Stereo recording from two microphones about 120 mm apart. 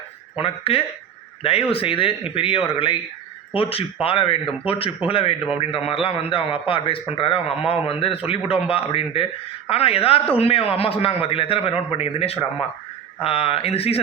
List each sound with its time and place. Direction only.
0.3 s a man's voice: 50° left (ahead or behind)